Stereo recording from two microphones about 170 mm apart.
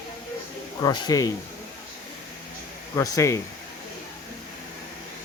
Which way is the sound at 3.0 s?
20° left (ahead or behind).